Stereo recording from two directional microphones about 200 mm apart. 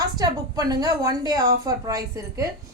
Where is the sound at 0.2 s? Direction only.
20° right (ahead or behind).